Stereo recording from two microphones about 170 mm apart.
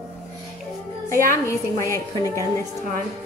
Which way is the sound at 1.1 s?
55° right (ahead or behind).